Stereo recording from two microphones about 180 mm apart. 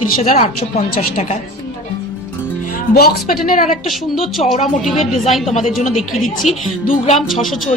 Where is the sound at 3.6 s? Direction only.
Centre (ahead or behind).